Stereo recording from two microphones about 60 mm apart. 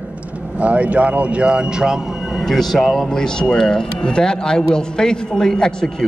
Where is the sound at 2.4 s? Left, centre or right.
Centre.